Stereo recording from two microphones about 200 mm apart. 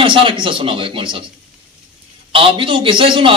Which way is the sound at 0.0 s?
25° right (ahead or behind).